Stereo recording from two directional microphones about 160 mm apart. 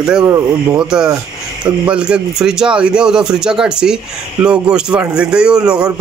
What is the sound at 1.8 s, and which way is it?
Speech, 5° right (ahead or behind).